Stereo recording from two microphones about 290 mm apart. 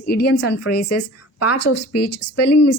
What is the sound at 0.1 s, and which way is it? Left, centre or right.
Speech, left.